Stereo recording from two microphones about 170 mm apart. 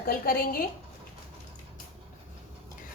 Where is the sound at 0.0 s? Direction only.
60° left (ahead or behind).